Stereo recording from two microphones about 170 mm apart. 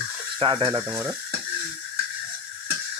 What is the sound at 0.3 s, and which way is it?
Speech, 30° right (ahead or behind).